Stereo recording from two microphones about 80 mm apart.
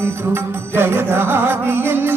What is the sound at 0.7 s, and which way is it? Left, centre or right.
Music, right.